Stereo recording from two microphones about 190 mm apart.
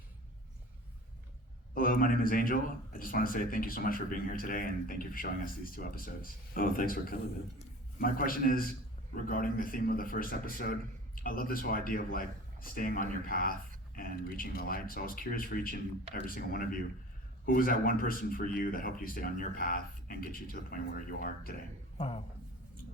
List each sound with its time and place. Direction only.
1.7 s a man's voice: 50° left (ahead or behind)
21.9 s a man's voice: 30° left (ahead or behind)